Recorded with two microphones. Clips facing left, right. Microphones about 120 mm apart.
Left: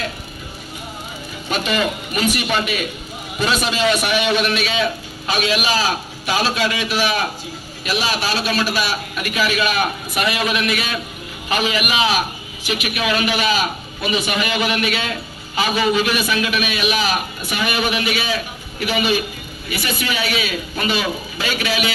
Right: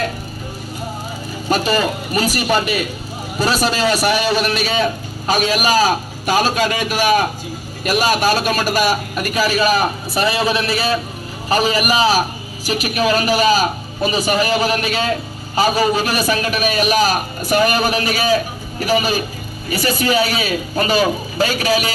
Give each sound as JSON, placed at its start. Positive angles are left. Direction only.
{"t": 1.5, "sound": "a man's voice", "side_deg": -40}